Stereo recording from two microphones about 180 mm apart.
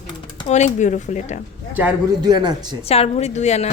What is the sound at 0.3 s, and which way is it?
A woman's voice, 40° left (ahead or behind).